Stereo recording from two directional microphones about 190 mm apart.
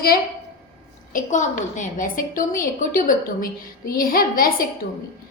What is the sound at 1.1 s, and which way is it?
A woman's voice, 40° left (ahead or behind).